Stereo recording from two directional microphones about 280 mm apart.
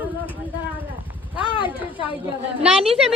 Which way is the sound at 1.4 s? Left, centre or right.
Centre.